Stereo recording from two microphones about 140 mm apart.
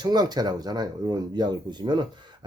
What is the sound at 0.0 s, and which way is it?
Speech, 30° right (ahead or behind).